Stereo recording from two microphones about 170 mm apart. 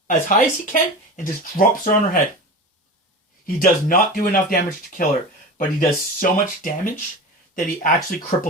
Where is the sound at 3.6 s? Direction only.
55° left (ahead or behind).